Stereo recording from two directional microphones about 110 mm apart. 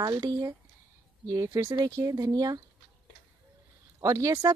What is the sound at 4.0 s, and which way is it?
Speech, 30° right (ahead or behind).